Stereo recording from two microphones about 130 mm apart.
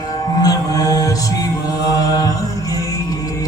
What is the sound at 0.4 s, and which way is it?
Mantra, 30° left (ahead or behind).